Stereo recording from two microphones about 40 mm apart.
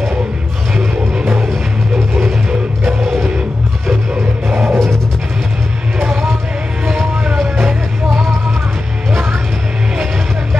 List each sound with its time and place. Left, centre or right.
4.5 s music: right
7.3 s music: centre
9.1 s music: right